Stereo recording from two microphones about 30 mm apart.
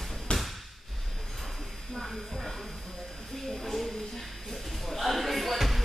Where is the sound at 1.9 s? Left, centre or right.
Centre.